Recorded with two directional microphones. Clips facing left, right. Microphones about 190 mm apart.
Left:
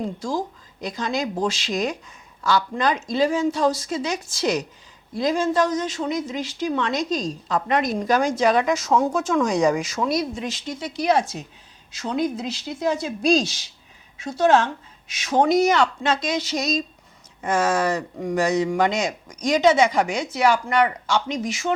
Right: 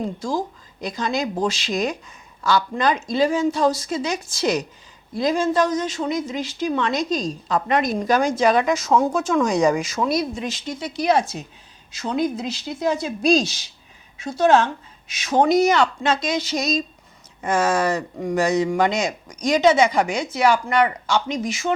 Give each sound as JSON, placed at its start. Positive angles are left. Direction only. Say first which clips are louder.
{"t": 0.2, "sound": "speech", "louder": "right 2 dB", "side_deg": -30}
{"t": 0.8, "sound": "speech", "louder": "right 1 dB", "side_deg": -10}
{"t": 8.9, "sound": "speech", "louder": "right 1 dB", "side_deg": -20}